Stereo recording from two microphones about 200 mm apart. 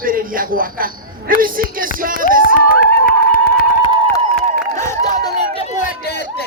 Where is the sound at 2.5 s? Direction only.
45° left (ahead or behind).